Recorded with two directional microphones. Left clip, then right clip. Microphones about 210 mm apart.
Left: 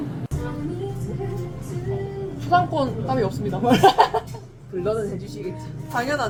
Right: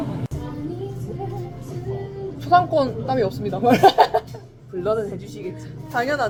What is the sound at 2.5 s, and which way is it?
Speech, 15° left (ahead or behind).